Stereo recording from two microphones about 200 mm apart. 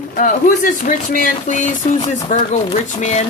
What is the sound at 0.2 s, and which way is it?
Speech, 40° left (ahead or behind).